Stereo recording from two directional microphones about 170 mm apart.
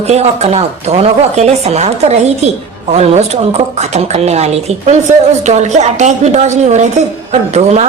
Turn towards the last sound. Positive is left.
turn(degrees=-40)  # may be behind; listen again after turning